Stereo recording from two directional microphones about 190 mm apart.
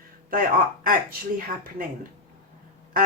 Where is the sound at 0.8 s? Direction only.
50° right (ahead or behind).